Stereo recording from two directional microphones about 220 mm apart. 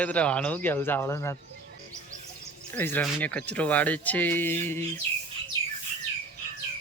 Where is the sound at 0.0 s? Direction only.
5° left (ahead or behind).